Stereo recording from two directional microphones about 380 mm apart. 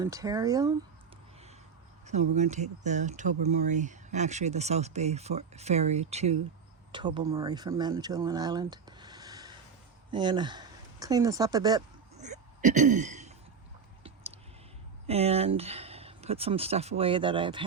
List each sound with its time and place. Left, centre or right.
0.0 s speech: centre
2.0 s speech: centre
15.0 s speech: centre